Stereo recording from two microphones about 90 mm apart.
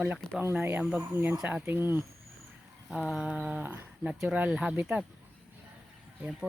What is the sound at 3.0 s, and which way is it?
Speech, 10° right (ahead or behind).